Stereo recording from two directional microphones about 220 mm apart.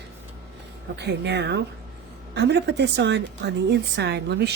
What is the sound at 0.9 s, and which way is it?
A woman's voice, 50° right (ahead or behind).